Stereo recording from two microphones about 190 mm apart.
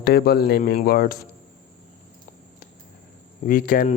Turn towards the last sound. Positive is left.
turn(degrees=45)  # may be behind; listen again after turning